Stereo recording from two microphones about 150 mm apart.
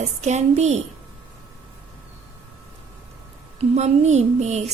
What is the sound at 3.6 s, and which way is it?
A woman's voice, 45° right (ahead or behind).